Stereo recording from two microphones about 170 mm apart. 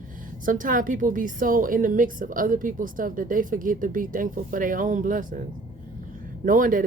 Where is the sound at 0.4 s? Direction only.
50° right (ahead or behind).